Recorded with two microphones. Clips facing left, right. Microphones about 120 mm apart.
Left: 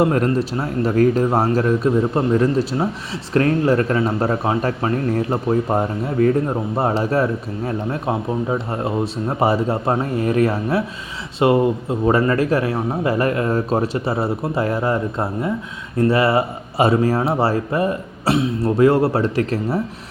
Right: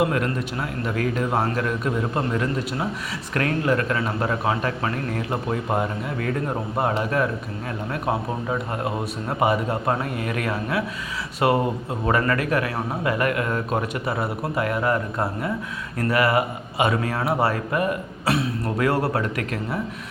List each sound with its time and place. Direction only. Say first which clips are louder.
0.0 s a man's voice: left 6 dB; 35° left (ahead or behind)